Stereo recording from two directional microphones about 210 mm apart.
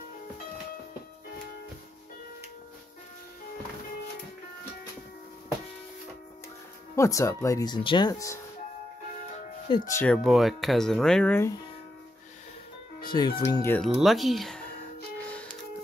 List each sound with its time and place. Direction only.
7.0 s speech: 15° left (ahead or behind)
9.7 s speech: 15° left (ahead or behind)
10.1 s speech: centre (ahead or behind)
13.1 s speech: 20° left (ahead or behind)
13.8 s speech: centre (ahead or behind)